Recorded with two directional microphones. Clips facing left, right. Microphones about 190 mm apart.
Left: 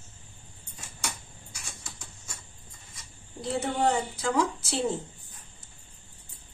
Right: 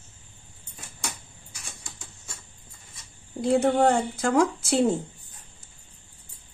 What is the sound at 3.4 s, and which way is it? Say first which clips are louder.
A woman's voice: right 7 dB; 50° right (ahead or behind).